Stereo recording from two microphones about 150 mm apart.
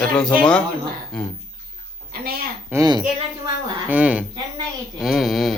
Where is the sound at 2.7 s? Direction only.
25° right (ahead or behind).